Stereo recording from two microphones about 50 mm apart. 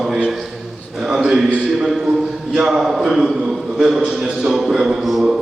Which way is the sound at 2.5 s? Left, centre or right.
Centre.